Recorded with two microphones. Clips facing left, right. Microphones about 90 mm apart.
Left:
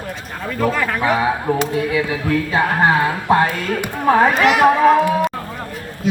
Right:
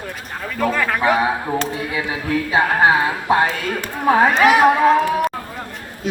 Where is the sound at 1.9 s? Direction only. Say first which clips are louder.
Left 4 dB; 20° right (ahead or behind).